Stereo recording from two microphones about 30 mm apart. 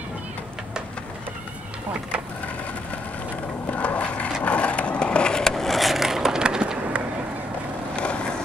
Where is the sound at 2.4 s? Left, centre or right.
Left.